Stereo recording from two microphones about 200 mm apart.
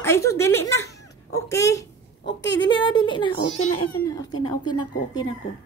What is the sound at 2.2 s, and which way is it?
Speech, 60° left (ahead or behind).